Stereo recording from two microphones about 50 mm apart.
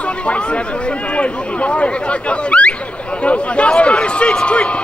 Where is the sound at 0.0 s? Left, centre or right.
Left.